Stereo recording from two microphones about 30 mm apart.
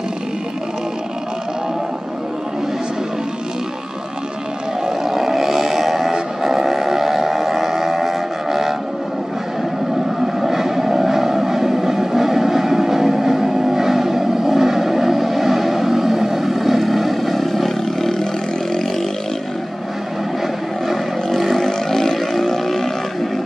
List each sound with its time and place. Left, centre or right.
5.0 s vehicle: centre
6.4 s a sound: centre
10.2 s vehicle: centre
21.5 s vehicle: centre